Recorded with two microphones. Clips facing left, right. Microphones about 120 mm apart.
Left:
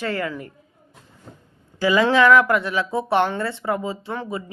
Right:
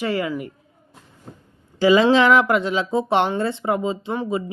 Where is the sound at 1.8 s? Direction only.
20° right (ahead or behind).